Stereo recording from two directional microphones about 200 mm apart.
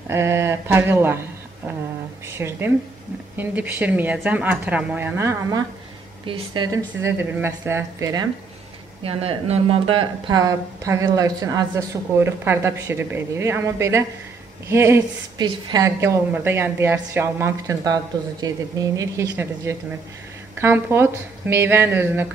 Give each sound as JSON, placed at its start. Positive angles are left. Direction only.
{"t": 0.1, "sound": "a woman's voice", "side_deg": -15}
{"t": 2.2, "sound": "a woman's voice", "side_deg": -15}
{"t": 9.0, "sound": "a woman's voice", "side_deg": -30}